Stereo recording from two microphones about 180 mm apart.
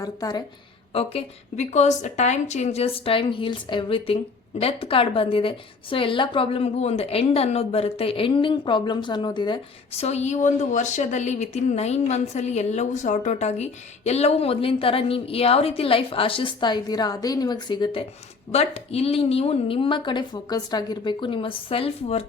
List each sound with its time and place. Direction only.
0.0 s a woman's voice: 20° left (ahead or behind)
0.9 s speech: 35° left (ahead or behind)
18.5 s speech: 35° left (ahead or behind)